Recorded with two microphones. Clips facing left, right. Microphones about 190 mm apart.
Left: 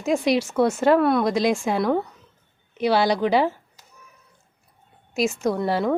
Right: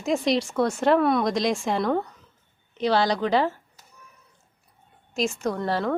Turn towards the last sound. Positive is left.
turn(degrees=10)  # may be behind; listen again after turning